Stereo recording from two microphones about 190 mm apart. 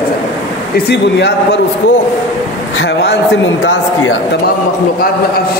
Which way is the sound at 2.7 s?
60° left (ahead or behind).